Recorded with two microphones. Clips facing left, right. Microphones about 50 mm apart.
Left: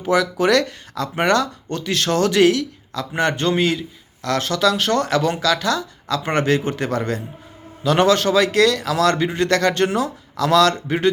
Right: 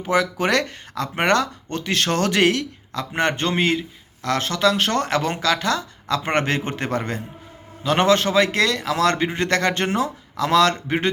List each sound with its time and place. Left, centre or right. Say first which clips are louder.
0.0 s speech: left 3 dB; right